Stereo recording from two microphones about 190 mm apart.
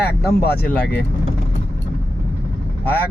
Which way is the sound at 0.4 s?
55° left (ahead or behind).